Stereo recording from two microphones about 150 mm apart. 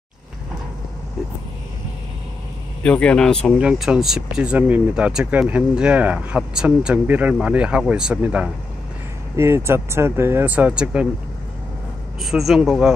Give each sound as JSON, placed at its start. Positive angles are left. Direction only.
{"t": 2.8, "sound": "speech", "side_deg": 5}
{"t": 3.5, "sound": "speech", "side_deg": -5}
{"t": 12.2, "sound": "speech", "side_deg": 0}